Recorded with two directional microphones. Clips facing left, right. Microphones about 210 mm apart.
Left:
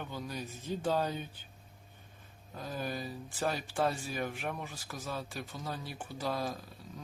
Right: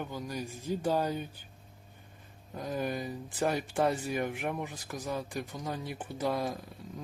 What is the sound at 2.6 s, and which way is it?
Speech, 20° right (ahead or behind).